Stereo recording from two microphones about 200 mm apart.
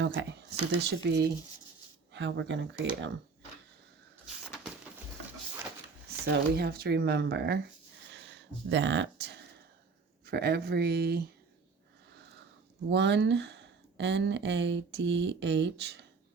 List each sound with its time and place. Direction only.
0.0 s speech: 65° right (ahead or behind)
6.2 s speech: 55° right (ahead or behind)
8.1 s a sound: 65° right (ahead or behind)
10.2 s speech: 55° right (ahead or behind)
12.9 s speech: 60° right (ahead or behind)